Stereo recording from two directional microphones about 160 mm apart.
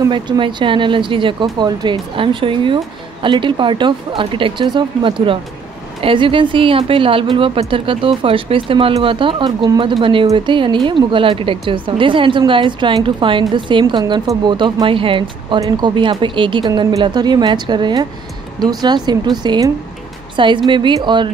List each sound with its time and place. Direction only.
0.1 s speech: 30° right (ahead or behind)